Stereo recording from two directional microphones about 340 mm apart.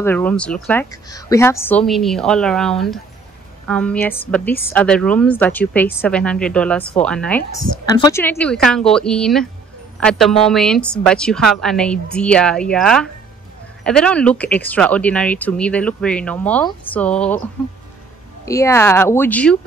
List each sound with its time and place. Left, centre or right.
0.0 s speech: centre